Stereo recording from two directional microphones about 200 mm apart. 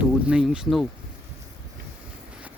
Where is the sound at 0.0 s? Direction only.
5° right (ahead or behind).